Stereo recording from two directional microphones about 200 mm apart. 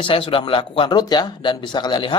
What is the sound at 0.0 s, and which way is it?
Speech, 25° left (ahead or behind).